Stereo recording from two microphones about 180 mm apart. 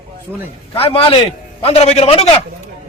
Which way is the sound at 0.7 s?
30° left (ahead or behind).